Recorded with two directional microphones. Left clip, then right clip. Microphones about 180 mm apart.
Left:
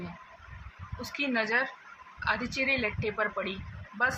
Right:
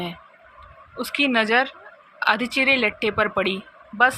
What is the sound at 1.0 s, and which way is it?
Speech, 55° right (ahead or behind).